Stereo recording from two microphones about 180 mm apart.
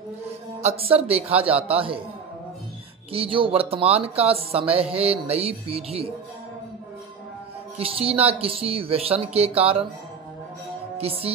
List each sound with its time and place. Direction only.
0.6 s speech: 35° right (ahead or behind)
3.1 s speech: 30° right (ahead or behind)
7.7 s speech: 35° right (ahead or behind)
11.0 s speech: 35° right (ahead or behind)